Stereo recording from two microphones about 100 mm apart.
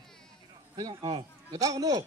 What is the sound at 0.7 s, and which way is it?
A man's voice, 35° right (ahead or behind).